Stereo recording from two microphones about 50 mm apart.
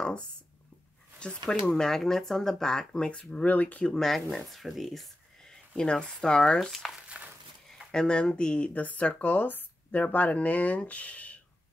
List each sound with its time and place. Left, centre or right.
1.5 s speech: centre; by 3.8 s left
3.8 s speech: centre
5.8 s speech: centre
6.7 s speech: centre
7.9 s speech: centre